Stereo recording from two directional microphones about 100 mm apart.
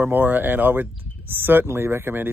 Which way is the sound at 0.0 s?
20° right (ahead or behind).